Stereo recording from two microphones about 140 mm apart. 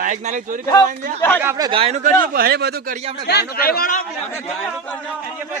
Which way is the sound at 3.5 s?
90° left.